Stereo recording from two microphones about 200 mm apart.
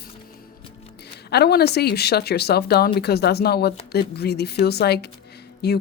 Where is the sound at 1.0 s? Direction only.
55° left (ahead or behind).